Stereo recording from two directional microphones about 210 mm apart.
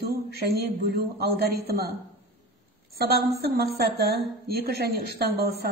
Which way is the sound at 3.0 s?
50° right (ahead or behind).